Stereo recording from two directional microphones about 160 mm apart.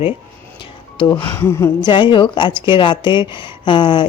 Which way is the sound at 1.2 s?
15° left (ahead or behind).